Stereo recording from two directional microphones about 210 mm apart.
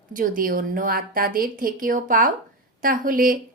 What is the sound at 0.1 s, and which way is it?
A woman's voice, 40° right (ahead or behind).